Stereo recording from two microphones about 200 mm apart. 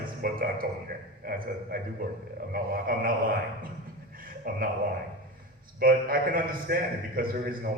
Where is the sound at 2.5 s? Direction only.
45° right (ahead or behind).